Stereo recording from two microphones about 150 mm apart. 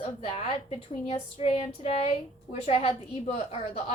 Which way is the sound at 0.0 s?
40° left (ahead or behind).